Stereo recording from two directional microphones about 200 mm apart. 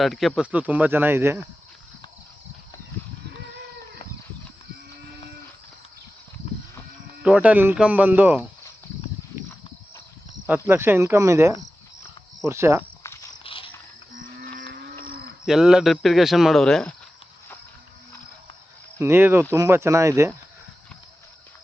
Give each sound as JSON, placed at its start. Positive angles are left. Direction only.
{"t": 0.0, "sound": "speech", "side_deg": 0}
{"t": 7.2, "sound": "speech", "side_deg": -5}
{"t": 10.4, "sound": "speech", "side_deg": -10}
{"t": 13.4, "sound": "cricket", "side_deg": 25}
{"t": 15.0, "sound": "cricket", "side_deg": -50}
{"t": 15.4, "sound": "speech", "side_deg": -5}
{"t": 18.9, "sound": "speech", "side_deg": -10}